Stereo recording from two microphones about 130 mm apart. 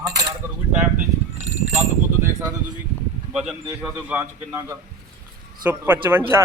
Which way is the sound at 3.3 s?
5° right (ahead or behind).